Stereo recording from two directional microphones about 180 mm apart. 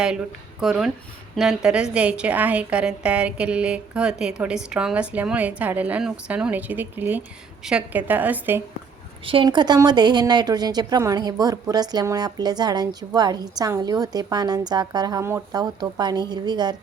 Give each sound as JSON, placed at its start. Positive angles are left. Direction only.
{"t": 0.6, "sound": "a woman's voice", "side_deg": 0}
{"t": 9.2, "sound": "a woman's voice", "side_deg": -30}